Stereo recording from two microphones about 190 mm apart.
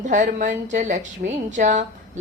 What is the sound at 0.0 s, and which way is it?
A woman's voice, 40° right (ahead or behind).